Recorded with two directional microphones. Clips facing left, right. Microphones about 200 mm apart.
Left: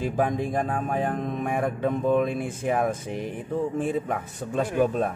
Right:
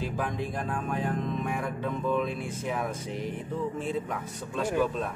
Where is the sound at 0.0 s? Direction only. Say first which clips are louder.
Left 6 dB; 45° left (ahead or behind).